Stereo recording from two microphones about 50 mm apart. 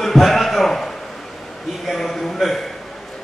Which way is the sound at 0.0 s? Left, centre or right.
Centre.